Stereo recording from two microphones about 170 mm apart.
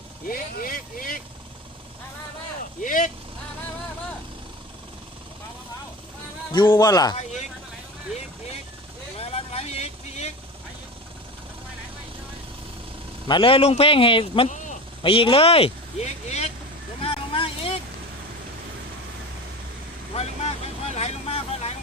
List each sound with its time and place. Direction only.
0.3 s speech: 55° left (ahead or behind)
2.8 s speech: 50° left (ahead or behind)
6.5 s speech: 25° left (ahead or behind)
9.1 s vehicle: 35° left (ahead or behind)
13.2 s speech: 30° left (ahead or behind)
17.0 s vehicle: 35° left (ahead or behind)
20.1 s vehicle: 40° left (ahead or behind)